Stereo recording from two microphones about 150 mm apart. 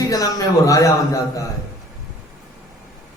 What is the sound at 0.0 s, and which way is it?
Speech, 20° left (ahead or behind).